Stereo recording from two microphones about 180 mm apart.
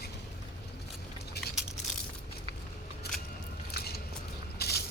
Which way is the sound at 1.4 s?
65° left (ahead or behind).